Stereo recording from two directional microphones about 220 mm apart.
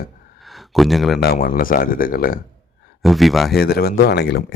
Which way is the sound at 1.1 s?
45° left (ahead or behind).